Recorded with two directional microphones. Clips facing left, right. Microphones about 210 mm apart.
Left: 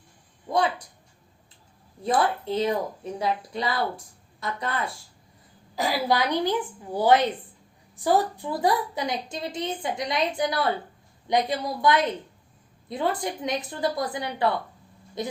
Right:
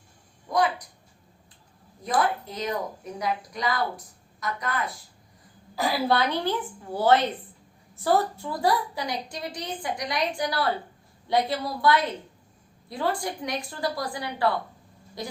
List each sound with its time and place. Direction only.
0.4 s a sound: 25° left (ahead or behind)
2.0 s speech: 25° left (ahead or behind)
5.7 s a woman's voice: 15° left (ahead or behind)